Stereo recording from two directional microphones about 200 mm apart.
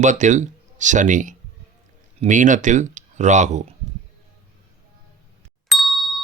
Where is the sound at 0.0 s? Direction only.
35° right (ahead or behind).